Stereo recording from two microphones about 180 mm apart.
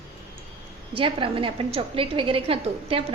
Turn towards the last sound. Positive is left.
turn(degrees=-30)  # may be behind; listen again after turning